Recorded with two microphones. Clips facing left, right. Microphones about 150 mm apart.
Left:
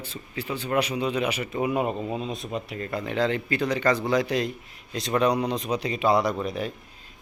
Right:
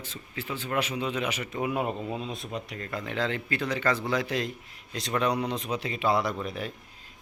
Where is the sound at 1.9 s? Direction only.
35° left (ahead or behind).